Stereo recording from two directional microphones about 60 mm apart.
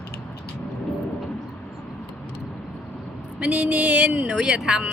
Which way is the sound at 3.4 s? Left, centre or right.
Centre.